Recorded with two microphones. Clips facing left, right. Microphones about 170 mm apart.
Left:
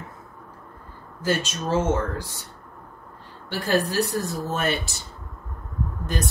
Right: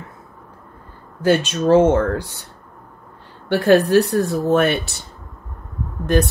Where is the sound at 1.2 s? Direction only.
60° right (ahead or behind).